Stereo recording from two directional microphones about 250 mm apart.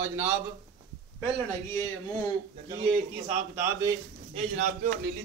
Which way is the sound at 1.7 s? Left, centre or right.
Centre.